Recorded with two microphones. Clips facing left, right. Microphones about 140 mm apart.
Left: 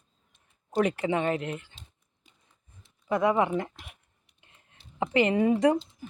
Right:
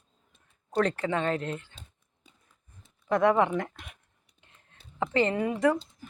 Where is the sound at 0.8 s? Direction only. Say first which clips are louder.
Left 1 dB; 15° left (ahead or behind).